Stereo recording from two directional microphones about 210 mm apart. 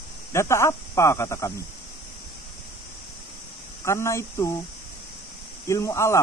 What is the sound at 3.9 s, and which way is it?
Speech, 15° left (ahead or behind).